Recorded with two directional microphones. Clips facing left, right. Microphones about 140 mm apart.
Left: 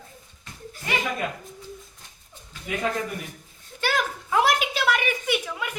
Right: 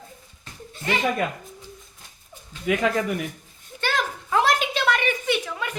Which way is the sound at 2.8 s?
90° right.